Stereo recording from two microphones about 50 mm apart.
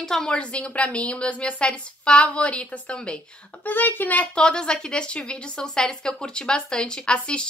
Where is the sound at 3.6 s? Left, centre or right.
Left.